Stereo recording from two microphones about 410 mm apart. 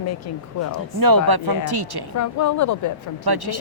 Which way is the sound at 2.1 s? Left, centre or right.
Left.